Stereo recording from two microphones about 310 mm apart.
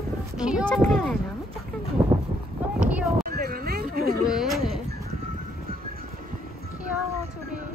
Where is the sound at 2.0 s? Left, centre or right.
Centre.